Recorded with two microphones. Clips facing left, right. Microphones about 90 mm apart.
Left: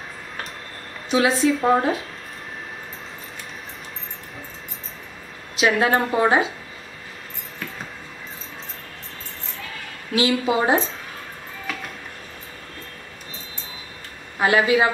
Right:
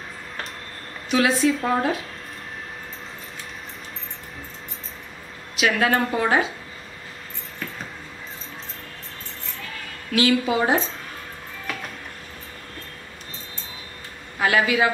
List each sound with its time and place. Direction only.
1.1 s a woman's voice: 35° left (ahead or behind)
5.6 s speech: 25° left (ahead or behind)
10.1 s speech: 25° left (ahead or behind)
14.4 s speech: 25° left (ahead or behind)